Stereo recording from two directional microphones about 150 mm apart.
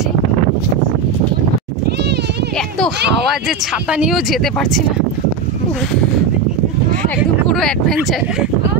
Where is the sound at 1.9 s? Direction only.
90° right.